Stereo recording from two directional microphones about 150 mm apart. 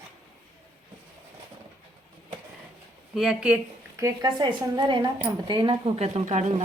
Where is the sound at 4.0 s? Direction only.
25° right (ahead or behind).